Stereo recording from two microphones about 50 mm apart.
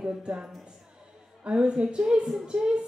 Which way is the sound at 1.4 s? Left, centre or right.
Centre.